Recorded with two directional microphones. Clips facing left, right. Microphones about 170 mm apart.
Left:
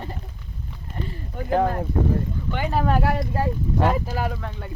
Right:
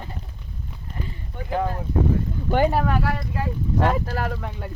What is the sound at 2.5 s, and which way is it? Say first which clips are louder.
Speech: right 10 dB; 35° right (ahead or behind).